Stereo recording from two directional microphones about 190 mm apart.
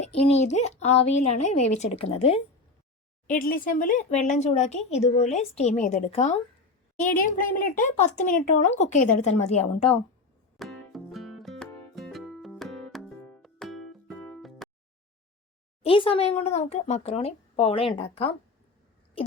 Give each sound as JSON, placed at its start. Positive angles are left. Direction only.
{"t": 0.1, "sound": "speech", "side_deg": 35}
{"t": 3.2, "sound": "speech", "side_deg": 50}
{"t": 10.6, "sound": "music", "side_deg": 0}
{"t": 15.8, "sound": "speech", "side_deg": 30}